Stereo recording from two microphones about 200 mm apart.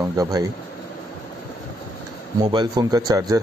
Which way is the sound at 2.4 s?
20° right (ahead or behind).